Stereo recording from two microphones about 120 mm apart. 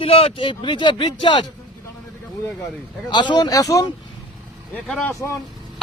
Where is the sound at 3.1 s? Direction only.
40° left (ahead or behind).